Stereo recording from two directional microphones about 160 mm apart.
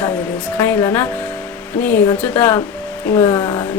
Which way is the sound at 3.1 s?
20° left (ahead or behind).